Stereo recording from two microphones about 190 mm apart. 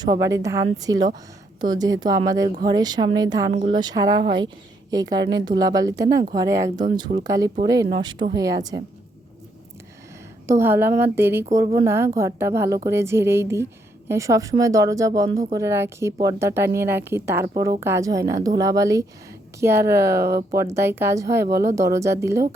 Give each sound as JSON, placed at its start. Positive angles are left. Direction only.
{"t": 0.0, "sound": "speech", "side_deg": -20}
{"t": 3.5, "sound": "a woman's voice", "side_deg": -35}
{"t": 3.8, "sound": "speech", "side_deg": -20}
{"t": 10.4, "sound": "a woman's voice", "side_deg": -15}